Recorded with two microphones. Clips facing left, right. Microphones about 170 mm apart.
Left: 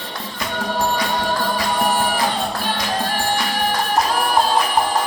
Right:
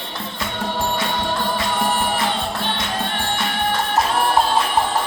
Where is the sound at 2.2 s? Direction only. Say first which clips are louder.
Left 1 dB; 25° right (ahead or behind).